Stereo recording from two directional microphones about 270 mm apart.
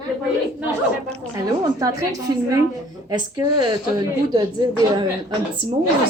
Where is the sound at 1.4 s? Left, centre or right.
Centre.